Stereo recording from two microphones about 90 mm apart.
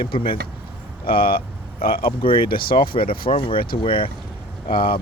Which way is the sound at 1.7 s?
90° left.